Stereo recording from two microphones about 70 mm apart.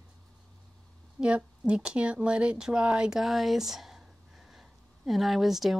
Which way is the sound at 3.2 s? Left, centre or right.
Centre.